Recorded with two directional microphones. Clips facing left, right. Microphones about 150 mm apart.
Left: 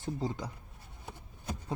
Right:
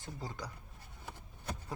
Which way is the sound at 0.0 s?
25° left (ahead or behind).